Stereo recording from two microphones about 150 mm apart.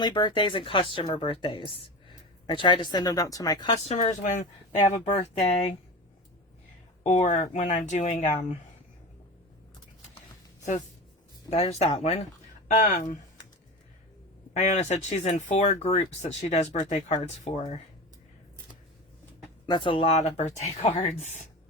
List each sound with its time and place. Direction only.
0.0 s a woman's voice: 30° left (ahead or behind)
3.8 s speech: 50° left (ahead or behind)
7.0 s speech: 55° left (ahead or behind)
11.5 s speech: 40° left (ahead or behind)
12.8 s speech: 60° left (ahead or behind)
14.5 s speech: 50° left (ahead or behind)
19.6 s speech: 30° left (ahead or behind)